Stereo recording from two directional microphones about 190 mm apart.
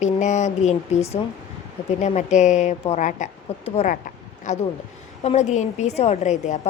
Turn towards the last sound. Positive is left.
turn(degrees=40)  # may be behind; listen again after turning